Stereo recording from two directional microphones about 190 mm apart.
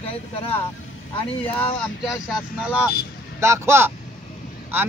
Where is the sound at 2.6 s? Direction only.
5° right (ahead or behind).